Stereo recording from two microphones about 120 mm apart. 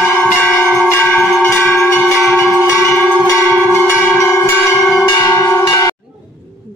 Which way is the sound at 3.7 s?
20° left (ahead or behind).